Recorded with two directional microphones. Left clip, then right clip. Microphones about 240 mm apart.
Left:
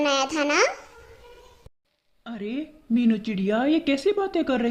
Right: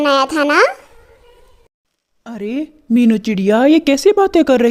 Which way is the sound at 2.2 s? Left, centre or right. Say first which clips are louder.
Right 9 dB; right.